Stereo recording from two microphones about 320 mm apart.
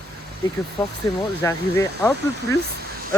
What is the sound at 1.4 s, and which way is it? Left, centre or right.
Speech, centre.